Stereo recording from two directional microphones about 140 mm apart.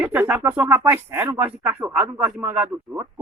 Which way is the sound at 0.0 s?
15° right (ahead or behind).